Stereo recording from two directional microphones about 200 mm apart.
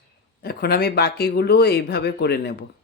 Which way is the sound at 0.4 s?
50° left (ahead or behind).